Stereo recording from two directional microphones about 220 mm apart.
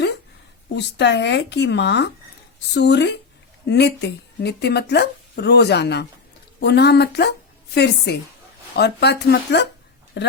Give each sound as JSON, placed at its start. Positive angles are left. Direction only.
{"t": 0.7, "sound": "speech", "side_deg": 50}